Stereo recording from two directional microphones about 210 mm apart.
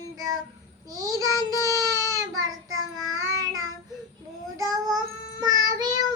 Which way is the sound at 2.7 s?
70° right (ahead or behind).